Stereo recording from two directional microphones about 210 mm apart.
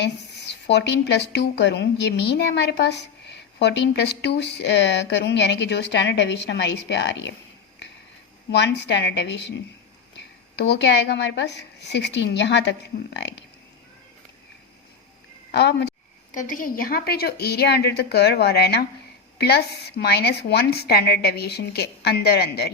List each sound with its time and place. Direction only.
0.0 s a woman's voice: 55° left (ahead or behind)
8.4 s a woman's voice: 55° left (ahead or behind)
15.5 s a woman's voice: 55° left (ahead or behind)
16.3 s a woman's voice: 40° left (ahead or behind)